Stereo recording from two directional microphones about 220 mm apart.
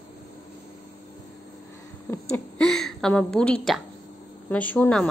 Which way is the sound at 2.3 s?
Centre (ahead or behind).